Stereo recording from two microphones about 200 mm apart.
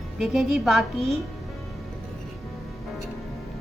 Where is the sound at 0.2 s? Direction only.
Centre (ahead or behind).